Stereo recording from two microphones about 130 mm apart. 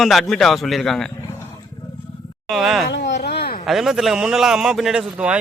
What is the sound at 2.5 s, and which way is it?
A man's voice, centre (ahead or behind).